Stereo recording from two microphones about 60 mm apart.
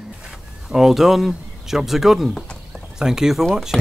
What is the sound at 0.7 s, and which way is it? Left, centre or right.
Speech, centre.